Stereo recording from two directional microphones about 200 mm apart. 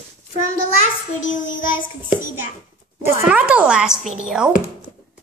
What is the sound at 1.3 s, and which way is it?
Child singing, 40° left (ahead or behind).